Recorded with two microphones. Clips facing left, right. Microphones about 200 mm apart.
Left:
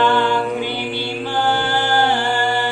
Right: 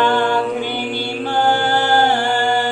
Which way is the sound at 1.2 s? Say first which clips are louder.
Right 3 dB; 45° right (ahead or behind).